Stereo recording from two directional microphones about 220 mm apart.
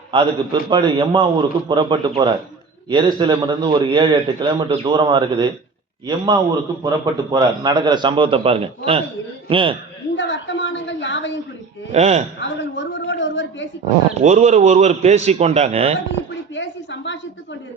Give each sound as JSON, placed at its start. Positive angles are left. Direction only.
{"t": 0.1, "sound": "a man's voice", "side_deg": -20}
{"t": 10.2, "sound": "a sound", "side_deg": 55}
{"t": 11.9, "sound": "a man's voice", "side_deg": -30}
{"t": 12.4, "sound": "a woman's voice", "side_deg": 55}
{"t": 14.1, "sound": "a man's voice", "side_deg": -30}
{"t": 16.6, "sound": "a sound", "side_deg": 55}